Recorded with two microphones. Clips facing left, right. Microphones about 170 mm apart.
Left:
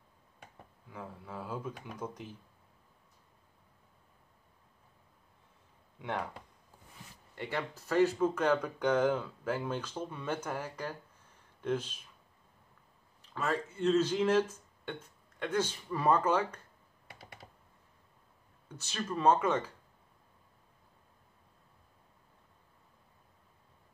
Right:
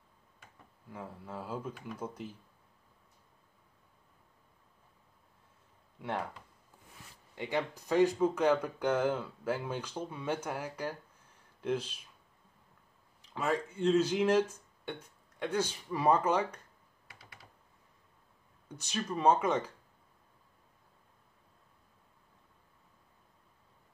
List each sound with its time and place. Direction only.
0.9 s speech: 5° right (ahead or behind)
5.9 s speech: 5° right (ahead or behind)
7.3 s speech: 15° right (ahead or behind)
13.2 s speech: 10° right (ahead or behind)
17.1 s computer keyboard: 25° left (ahead or behind)
18.9 s speech: 10° right (ahead or behind)